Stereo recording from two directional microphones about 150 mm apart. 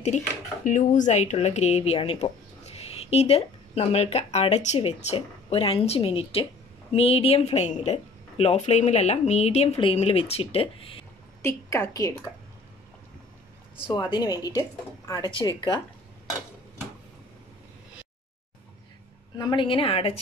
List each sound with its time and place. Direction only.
0.1 s speech: 55° left (ahead or behind); by 11.1 s 40° left (ahead or behind)
11.4 s speech: 20° left (ahead or behind)
13.8 s speech: 30° left (ahead or behind)
19.3 s speech: 30° left (ahead or behind)